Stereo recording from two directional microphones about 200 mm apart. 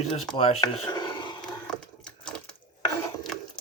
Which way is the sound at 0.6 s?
20° left (ahead or behind).